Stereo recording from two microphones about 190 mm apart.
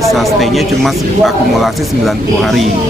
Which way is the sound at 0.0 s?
Centre (ahead or behind).